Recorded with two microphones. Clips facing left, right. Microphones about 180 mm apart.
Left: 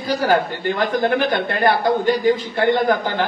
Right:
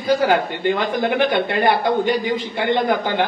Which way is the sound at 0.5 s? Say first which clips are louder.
Even; 15° right (ahead or behind).